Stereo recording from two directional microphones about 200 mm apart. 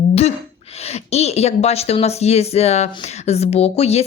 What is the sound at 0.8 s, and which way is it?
Speech, 30° left (ahead or behind).